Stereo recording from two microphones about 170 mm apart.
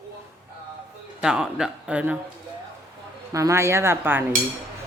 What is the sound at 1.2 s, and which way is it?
Speech, 5° right (ahead or behind).